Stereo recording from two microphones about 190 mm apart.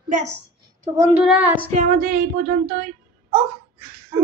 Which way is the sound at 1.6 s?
45° right (ahead or behind).